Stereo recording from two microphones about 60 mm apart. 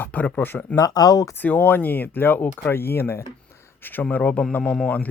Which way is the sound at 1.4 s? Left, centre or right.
Left.